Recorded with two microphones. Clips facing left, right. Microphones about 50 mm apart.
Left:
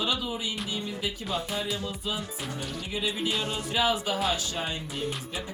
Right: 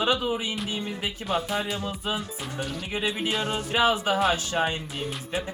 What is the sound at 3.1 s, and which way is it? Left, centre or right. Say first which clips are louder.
Music: right 2 dB; centre.